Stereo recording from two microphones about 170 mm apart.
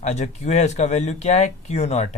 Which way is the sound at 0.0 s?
40° left (ahead or behind).